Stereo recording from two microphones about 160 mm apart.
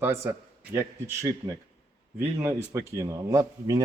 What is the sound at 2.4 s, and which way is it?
Speech, 20° right (ahead or behind).